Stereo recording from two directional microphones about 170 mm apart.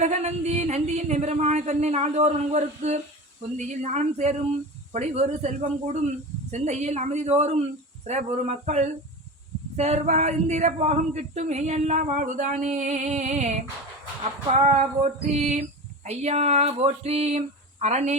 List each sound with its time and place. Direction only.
0.0 s speech: 40° right (ahead or behind)